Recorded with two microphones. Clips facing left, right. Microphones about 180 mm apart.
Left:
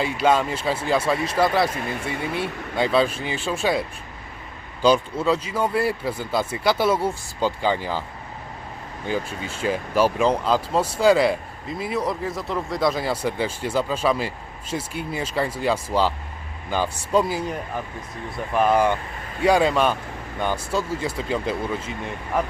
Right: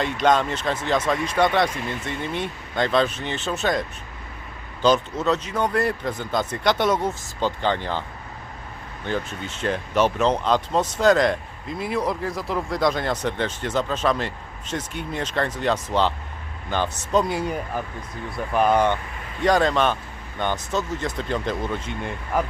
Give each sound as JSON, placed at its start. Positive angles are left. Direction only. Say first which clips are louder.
{"t": 0.0, "sound": "speech", "louder": "even", "side_deg": 5}
{"t": 1.7, "sound": "speech", "louder": "left 1 dB", "side_deg": 55}
{"t": 2.2, "sound": "speech", "louder": "left 2 dB", "side_deg": 5}
{"t": 9.0, "sound": "speech", "louder": "left 1 dB", "side_deg": 5}